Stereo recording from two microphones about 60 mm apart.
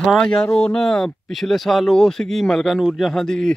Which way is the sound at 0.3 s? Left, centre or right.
Centre.